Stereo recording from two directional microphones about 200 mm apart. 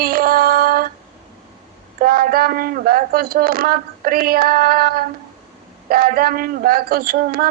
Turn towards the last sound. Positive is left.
turn(degrees=-50)  # may be behind; listen again after turning